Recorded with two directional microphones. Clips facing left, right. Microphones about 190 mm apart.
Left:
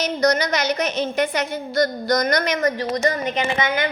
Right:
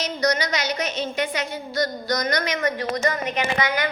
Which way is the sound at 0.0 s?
55° left (ahead or behind).